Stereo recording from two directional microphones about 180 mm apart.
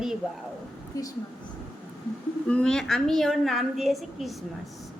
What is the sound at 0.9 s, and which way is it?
Speech, 15° left (ahead or behind).